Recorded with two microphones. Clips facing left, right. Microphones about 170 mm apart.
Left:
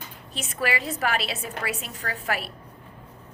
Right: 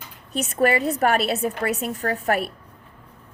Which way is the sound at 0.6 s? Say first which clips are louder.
Right 7 dB; 50° right (ahead or behind).